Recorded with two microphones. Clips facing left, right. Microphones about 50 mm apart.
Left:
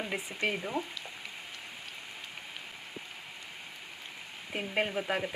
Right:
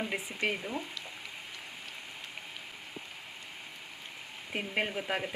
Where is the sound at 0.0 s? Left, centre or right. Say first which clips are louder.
Even; centre.